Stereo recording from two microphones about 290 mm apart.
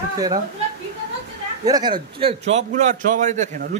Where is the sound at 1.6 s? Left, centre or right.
Centre.